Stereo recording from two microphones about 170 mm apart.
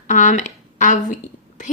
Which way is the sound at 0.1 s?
45° left (ahead or behind).